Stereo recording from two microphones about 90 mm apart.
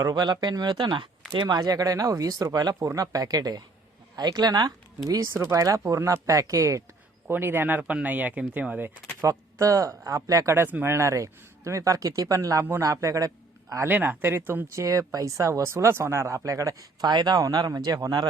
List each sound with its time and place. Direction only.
0.0 s speech: 50° right (ahead or behind)
7.3 s speech: 25° right (ahead or behind)
9.2 s speech: 40° right (ahead or behind)
10.5 s speech: 20° right (ahead or behind)
10.9 s a man's voice: 35° right (ahead or behind)
13.8 s speech: 20° right (ahead or behind)
14.7 s speech: 35° right (ahead or behind)
17.1 s speech: 50° right (ahead or behind)